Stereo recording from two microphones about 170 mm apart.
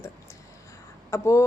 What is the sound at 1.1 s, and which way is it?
Speech, 15° left (ahead or behind).